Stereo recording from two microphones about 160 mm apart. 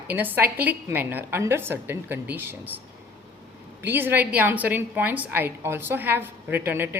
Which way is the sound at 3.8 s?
10° right (ahead or behind).